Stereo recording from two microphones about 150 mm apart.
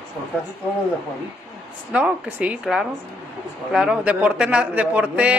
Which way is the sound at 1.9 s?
10° right (ahead or behind).